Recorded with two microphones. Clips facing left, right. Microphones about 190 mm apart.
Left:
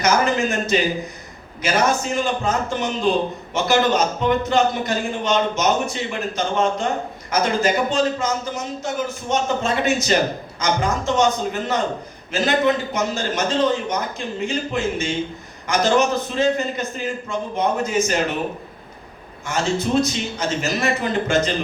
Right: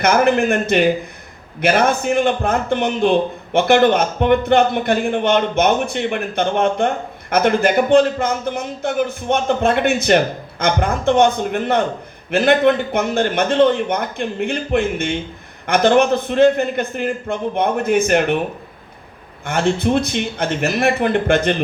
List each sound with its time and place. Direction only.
0.0 s a man's voice: 60° right (ahead or behind)
19.5 s a man's voice: 60° right (ahead or behind)